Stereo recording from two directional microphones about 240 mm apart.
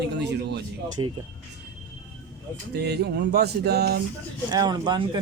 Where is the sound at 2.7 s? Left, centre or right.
Right.